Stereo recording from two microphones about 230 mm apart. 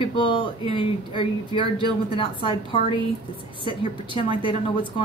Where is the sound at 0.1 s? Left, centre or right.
Left.